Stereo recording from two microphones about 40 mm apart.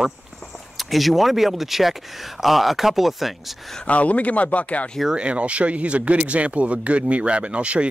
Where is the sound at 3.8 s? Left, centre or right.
Left.